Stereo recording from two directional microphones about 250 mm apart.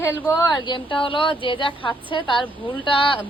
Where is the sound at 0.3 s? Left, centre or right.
Centre.